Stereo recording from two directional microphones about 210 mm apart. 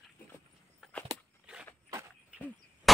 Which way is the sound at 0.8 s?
5° left (ahead or behind).